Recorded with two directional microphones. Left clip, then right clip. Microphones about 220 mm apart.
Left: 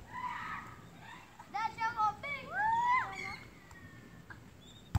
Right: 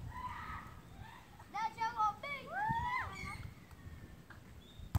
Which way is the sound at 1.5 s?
15° right (ahead or behind).